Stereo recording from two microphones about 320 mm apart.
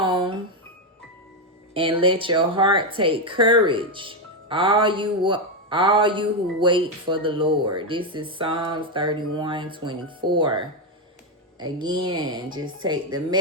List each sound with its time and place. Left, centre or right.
0.0 s music: centre
1.7 s a woman's voice: centre